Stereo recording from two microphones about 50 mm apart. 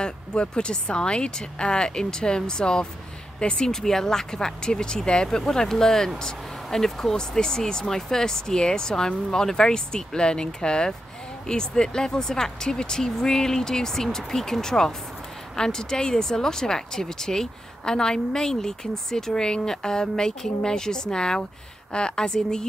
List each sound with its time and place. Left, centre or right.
0.0 s speech: centre